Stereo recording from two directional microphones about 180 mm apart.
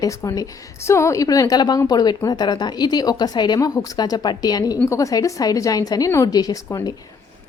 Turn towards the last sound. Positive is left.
turn(degrees=20)  # may be behind; listen again after turning